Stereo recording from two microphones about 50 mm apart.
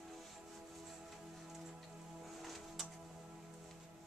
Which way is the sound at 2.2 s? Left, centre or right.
Centre.